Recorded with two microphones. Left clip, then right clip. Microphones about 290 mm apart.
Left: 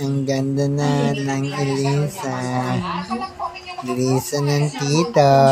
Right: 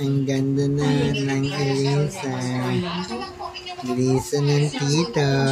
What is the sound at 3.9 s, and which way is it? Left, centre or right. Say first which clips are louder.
Mantra: left 1 dB; centre.